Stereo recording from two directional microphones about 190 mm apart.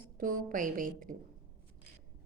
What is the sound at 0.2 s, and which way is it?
Speech, 45° right (ahead or behind).